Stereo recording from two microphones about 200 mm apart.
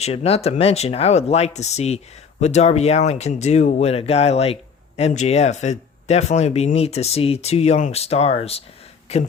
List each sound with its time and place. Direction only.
0.0 s speech: 30° left (ahead or behind)